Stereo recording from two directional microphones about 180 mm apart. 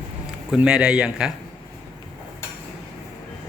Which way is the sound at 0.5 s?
5° right (ahead or behind).